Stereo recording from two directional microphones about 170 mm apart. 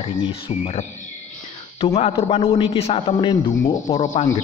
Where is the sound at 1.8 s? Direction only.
35° left (ahead or behind).